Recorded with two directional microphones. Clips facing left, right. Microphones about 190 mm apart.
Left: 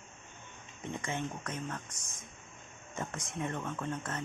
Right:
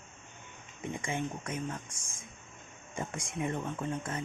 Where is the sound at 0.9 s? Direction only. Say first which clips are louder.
Right 1 dB; 10° right (ahead or behind).